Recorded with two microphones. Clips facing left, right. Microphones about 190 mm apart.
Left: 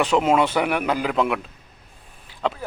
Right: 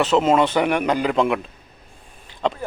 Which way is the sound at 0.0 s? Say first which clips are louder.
Right 2 dB; 10° left (ahead or behind).